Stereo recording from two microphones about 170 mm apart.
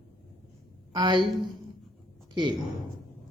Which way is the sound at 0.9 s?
25° right (ahead or behind).